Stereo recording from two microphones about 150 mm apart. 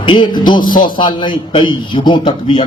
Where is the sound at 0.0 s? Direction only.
35° left (ahead or behind).